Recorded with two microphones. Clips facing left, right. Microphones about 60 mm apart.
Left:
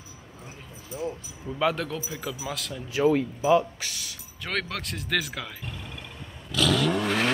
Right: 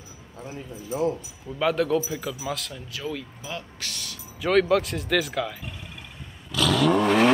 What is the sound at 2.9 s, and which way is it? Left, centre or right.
Speech, left.